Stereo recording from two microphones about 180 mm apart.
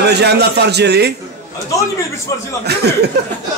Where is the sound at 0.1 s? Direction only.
65° right (ahead or behind).